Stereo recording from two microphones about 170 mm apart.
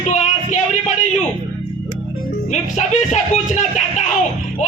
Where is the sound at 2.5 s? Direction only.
45° left (ahead or behind).